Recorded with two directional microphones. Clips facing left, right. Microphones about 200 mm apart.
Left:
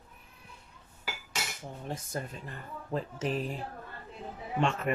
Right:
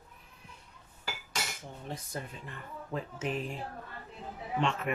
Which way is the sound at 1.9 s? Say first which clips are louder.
Left 3 dB; 45° left (ahead or behind).